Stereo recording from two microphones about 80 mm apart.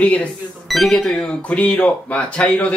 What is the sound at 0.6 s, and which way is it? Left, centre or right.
A man's voice, centre.